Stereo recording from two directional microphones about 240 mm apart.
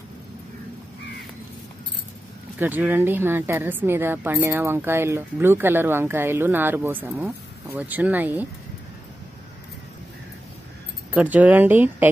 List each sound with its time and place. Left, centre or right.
2.6 s a woman's voice: centre
11.1 s a woman's voice: centre